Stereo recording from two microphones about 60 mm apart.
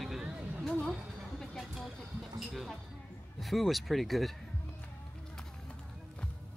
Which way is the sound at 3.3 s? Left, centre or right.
Centre.